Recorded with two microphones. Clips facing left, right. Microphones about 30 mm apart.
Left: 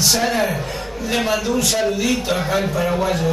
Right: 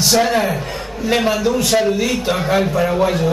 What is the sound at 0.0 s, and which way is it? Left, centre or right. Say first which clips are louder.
A man's voice: right 3 dB; centre.